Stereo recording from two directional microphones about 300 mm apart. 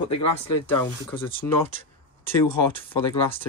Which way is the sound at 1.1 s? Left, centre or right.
Centre.